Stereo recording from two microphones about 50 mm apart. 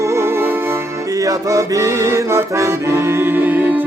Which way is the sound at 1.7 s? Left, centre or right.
Right.